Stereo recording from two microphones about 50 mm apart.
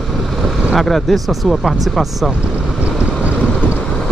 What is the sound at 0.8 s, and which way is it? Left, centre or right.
Speech, centre.